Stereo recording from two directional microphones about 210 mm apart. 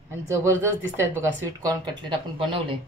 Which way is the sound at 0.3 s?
10° right (ahead or behind).